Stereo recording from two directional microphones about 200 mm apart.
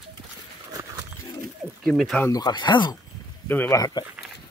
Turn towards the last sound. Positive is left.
turn(degrees=15)  # may be behind; listen again after turning